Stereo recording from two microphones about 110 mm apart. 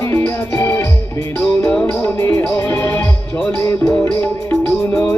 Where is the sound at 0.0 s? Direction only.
20° left (ahead or behind).